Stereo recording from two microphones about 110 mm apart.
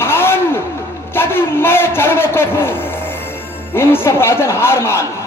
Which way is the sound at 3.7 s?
20° left (ahead or behind).